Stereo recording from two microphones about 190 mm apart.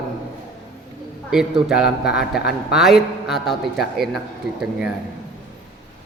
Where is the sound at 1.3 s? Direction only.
Centre (ahead or behind).